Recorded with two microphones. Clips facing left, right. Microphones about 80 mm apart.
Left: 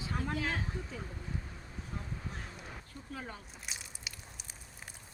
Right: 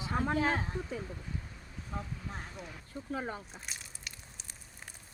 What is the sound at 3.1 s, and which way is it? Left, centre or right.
Speech, right.